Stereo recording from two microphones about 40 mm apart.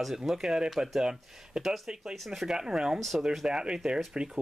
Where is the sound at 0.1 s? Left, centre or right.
Centre.